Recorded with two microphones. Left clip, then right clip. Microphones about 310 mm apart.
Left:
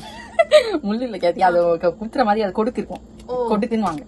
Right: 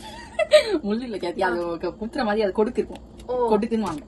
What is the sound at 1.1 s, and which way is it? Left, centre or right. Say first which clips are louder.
Speech: left 9 dB; centre.